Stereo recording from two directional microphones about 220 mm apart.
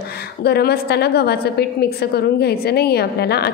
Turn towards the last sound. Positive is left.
turn(degrees=45)  # may be behind; listen again after turning